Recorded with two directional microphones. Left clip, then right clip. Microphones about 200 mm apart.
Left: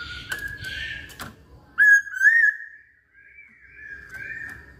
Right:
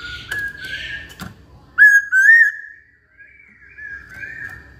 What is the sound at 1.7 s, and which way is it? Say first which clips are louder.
Whistling: right 6 dB; 15° right (ahead or behind).